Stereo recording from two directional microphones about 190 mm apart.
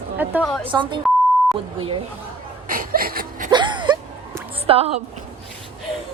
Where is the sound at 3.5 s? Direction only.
25° right (ahead or behind).